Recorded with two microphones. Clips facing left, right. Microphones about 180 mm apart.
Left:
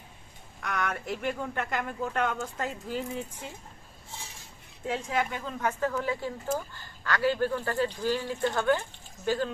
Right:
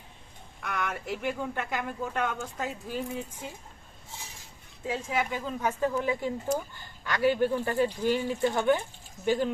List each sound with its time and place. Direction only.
0.6 s speech: 5° right (ahead or behind)
4.8 s speech: 5° right (ahead or behind)